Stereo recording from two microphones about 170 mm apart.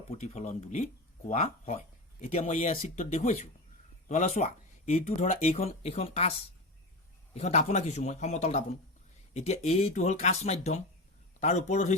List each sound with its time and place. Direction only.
0.1 s speech: 40° left (ahead or behind)
7.3 s speech: 40° left (ahead or behind)